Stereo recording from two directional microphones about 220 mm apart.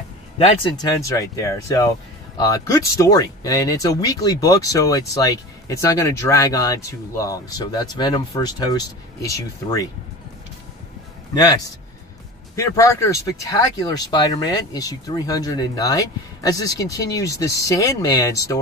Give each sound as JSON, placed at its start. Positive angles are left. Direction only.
{"t": 0.7, "sound": "speech", "side_deg": 20}
{"t": 11.3, "sound": "speech", "side_deg": 15}